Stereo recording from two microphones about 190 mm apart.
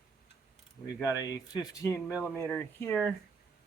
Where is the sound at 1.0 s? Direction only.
20° left (ahead or behind).